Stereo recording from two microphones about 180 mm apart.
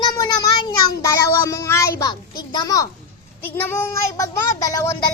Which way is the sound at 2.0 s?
20° left (ahead or behind).